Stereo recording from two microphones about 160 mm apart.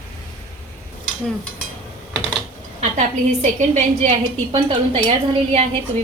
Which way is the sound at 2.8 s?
45° right (ahead or behind).